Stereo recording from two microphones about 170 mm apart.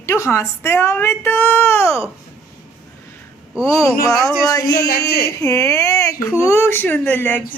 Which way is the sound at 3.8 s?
20° left (ahead or behind).